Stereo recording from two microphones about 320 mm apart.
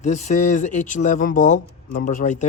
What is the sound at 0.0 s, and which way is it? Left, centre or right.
Speech, left.